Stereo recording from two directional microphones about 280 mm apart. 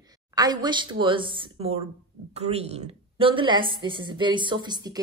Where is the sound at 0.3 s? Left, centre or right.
Centre.